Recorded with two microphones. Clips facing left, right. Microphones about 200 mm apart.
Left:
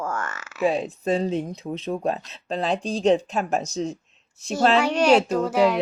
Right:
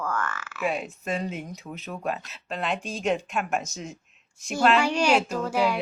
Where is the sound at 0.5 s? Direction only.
35° left (ahead or behind).